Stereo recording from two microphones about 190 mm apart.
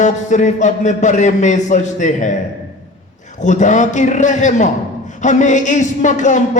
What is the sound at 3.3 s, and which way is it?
A man's voice, 40° left (ahead or behind).